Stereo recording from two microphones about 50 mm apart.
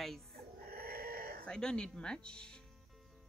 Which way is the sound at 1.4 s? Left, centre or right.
Centre.